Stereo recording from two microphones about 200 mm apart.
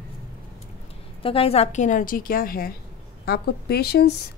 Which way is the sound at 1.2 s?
25° left (ahead or behind).